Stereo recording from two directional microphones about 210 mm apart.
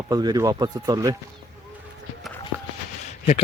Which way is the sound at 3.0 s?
35° left (ahead or behind).